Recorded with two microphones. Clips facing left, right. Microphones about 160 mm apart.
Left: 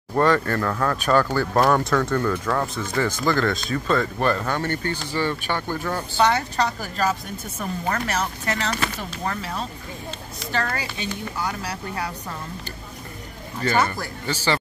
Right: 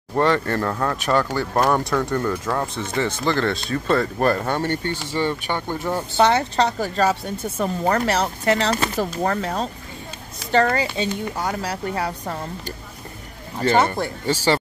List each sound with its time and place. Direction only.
0.2 s speech: 25° right (ahead or behind); by 9.7 s 45° right (ahead or behind)
10.6 s speech: 30° right (ahead or behind)
13.6 s speech: 30° right (ahead or behind)